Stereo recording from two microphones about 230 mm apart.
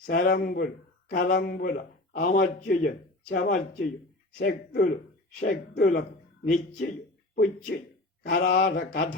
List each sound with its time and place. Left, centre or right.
0.1 s speech: left
8.2 s speech: left